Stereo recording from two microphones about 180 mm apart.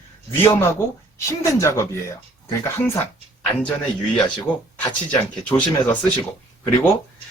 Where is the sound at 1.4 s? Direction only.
15° left (ahead or behind).